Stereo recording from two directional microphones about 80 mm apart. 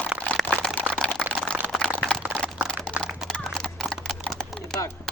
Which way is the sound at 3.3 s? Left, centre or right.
Centre.